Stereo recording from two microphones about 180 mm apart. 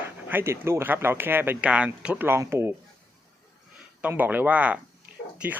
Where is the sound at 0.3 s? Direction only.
15° right (ahead or behind).